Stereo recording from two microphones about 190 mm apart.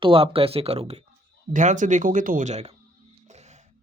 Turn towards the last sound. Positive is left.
turn(degrees=-35)  # may be behind; listen again after turning